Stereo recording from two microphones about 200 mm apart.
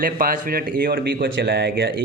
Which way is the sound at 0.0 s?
45° right (ahead or behind).